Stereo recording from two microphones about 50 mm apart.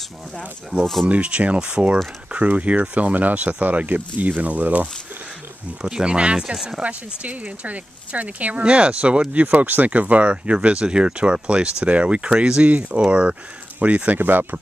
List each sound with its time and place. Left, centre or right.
0.7 s speech: right
5.8 s speech: centre
6.8 s speech: right
14.1 s speech: right